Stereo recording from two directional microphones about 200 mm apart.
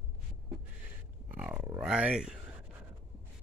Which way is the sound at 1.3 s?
5° right (ahead or behind).